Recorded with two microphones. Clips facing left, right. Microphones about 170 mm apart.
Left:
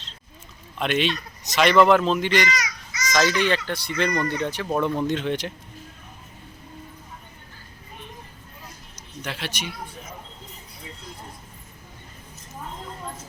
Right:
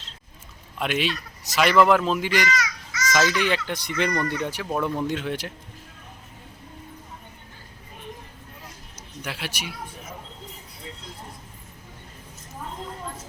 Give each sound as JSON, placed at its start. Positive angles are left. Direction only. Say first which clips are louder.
{"t": 0.8, "sound": "speech", "louder": "left 2 dB", "side_deg": -5}
{"t": 2.5, "sound": "children playing", "louder": "right 2 dB", "side_deg": 20}
{"t": 3.4, "sound": "speech", "louder": "left 2 dB", "side_deg": -15}
{"t": 4.1, "sound": "speech", "louder": "left 1 dB", "side_deg": 20}
{"t": 4.4, "sound": "speech", "louder": "left 2 dB", "side_deg": -10}
{"t": 9.2, "sound": "speech", "louder": "left 1 dB", "side_deg": -10}